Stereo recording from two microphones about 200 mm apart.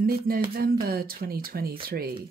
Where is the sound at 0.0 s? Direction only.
50° right (ahead or behind).